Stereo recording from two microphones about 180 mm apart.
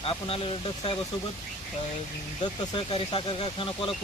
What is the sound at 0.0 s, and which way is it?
Speech, 30° left (ahead or behind).